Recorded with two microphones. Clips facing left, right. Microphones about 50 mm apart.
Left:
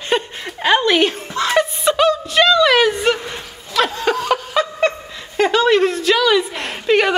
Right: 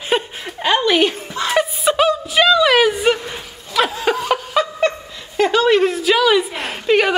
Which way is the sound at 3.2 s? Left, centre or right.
Centre.